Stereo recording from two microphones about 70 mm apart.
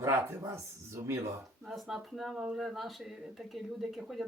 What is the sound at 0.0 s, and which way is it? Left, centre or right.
Speech, right.